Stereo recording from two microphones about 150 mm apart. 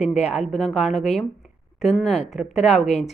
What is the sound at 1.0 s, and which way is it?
Speech, centre (ahead or behind).